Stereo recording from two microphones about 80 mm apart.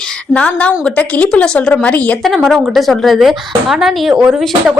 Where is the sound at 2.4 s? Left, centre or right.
Centre.